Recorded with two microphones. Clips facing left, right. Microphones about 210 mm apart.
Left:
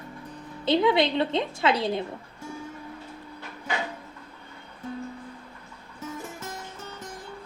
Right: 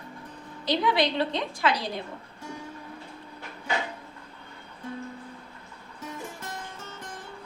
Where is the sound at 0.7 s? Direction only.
25° left (ahead or behind).